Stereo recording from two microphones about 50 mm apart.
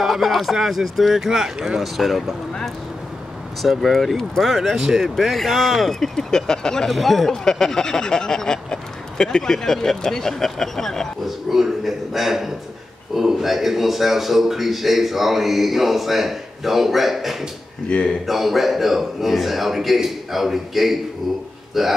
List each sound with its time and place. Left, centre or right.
0.0 s a man's voice: centre
2.0 s a man's voice: centre
3.8 s a man's voice: centre
11.2 s a man's voice: centre
17.8 s speech: left
18.2 s a man's voice: centre